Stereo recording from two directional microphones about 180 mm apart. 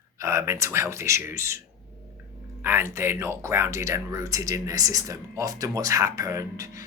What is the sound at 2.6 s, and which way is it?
Speech, 15° right (ahead or behind).